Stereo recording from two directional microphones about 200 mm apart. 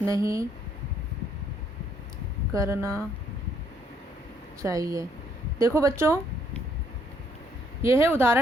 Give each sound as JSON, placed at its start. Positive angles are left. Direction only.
{"t": 0.0, "sound": "speech", "side_deg": -15}
{"t": 2.5, "sound": "speech", "side_deg": -15}
{"t": 4.6, "sound": "speech", "side_deg": -15}
{"t": 7.8, "sound": "speech", "side_deg": -10}